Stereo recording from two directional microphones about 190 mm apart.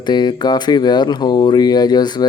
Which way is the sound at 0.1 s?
20° left (ahead or behind).